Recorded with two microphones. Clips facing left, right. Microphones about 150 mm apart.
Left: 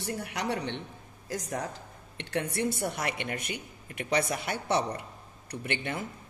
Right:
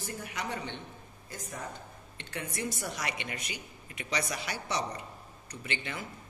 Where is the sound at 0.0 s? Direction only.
70° left (ahead or behind).